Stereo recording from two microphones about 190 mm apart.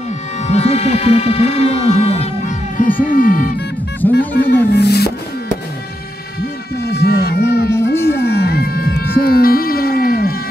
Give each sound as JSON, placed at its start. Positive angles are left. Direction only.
{"t": 0.5, "sound": "music", "side_deg": 35}
{"t": 4.0, "sound": "speech", "side_deg": 10}
{"t": 4.5, "sound": "music", "side_deg": 60}
{"t": 6.8, "sound": "a sound", "side_deg": 60}
{"t": 7.7, "sound": "music", "side_deg": 15}
{"t": 8.2, "sound": "music", "side_deg": 60}